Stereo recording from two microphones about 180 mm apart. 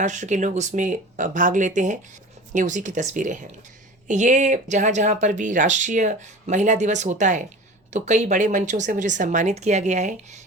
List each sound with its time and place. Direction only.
0.0 s speech: 40° right (ahead or behind)